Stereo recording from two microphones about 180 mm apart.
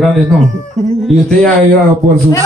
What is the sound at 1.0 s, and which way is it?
Speech, 5° left (ahead or behind).